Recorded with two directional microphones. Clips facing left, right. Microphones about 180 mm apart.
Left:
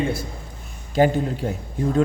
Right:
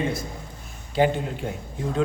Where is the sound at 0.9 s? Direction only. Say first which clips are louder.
Left 3 dB; 40° left (ahead or behind).